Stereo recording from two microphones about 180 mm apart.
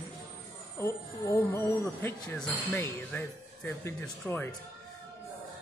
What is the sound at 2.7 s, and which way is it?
Speech, 15° left (ahead or behind).